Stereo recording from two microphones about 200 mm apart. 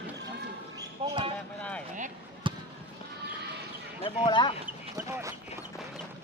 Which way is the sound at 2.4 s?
25° right (ahead or behind).